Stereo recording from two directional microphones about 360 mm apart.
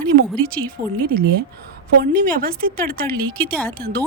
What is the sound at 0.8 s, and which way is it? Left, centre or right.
Speech, right.